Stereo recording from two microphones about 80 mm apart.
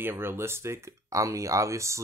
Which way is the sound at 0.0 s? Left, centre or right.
Right.